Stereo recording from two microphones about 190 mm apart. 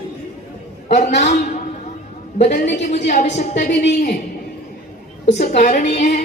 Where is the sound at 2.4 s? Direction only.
45° left (ahead or behind).